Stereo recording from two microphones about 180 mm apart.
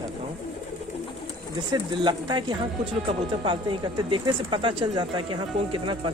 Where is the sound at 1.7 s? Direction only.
25° right (ahead or behind).